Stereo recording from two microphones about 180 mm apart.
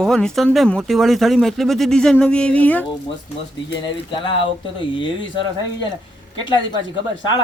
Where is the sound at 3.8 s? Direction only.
25° left (ahead or behind).